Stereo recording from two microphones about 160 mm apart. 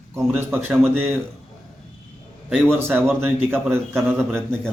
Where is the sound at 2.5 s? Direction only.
5° left (ahead or behind).